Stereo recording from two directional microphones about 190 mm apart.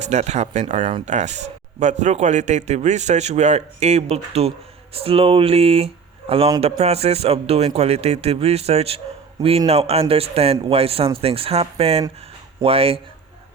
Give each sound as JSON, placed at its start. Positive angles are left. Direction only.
{"t": 0.0, "sound": "speech", "side_deg": -35}